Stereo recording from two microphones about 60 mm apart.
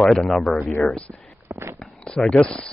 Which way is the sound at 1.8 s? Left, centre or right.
Centre.